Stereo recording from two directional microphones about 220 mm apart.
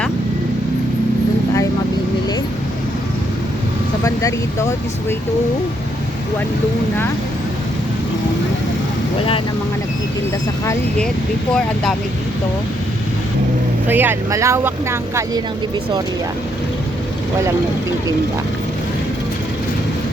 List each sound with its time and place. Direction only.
4.0 s speech: 15° left (ahead or behind)
10.7 s speech: 5° left (ahead or behind)
13.8 s speech: 10° right (ahead or behind)